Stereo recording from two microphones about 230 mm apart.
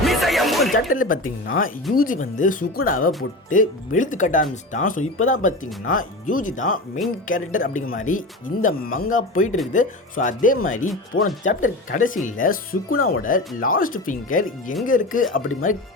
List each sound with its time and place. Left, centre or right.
0.0 s music: centre
0.8 s speech: left